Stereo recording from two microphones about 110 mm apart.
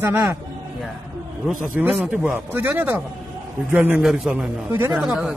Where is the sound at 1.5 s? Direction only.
15° right (ahead or behind).